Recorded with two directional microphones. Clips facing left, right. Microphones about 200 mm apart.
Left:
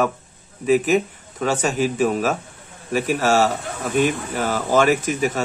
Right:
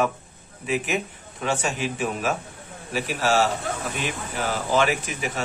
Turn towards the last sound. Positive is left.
turn(degrees=45)  # may be behind; listen again after turning